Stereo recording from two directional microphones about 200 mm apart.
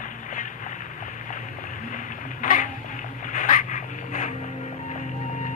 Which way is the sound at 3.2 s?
40° left (ahead or behind).